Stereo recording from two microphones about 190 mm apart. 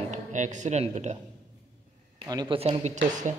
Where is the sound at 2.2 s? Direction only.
25° right (ahead or behind); by 3.3 s 40° right (ahead or behind).